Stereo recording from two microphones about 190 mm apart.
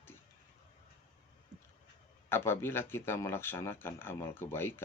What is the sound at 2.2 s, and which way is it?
Speech, 10° left (ahead or behind).